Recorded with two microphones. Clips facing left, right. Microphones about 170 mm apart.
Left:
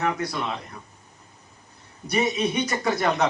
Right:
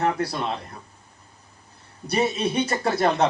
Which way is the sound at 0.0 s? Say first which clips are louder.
Right 2 dB; 30° right (ahead or behind).